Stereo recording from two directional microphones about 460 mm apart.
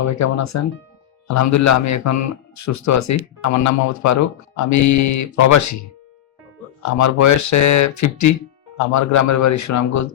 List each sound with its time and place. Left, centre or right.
0.1 s speech: left